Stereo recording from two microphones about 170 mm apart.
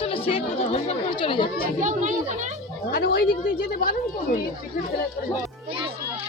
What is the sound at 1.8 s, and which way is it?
Speech, 45° right (ahead or behind).